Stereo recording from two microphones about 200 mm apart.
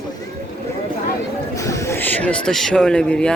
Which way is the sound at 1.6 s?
15° left (ahead or behind).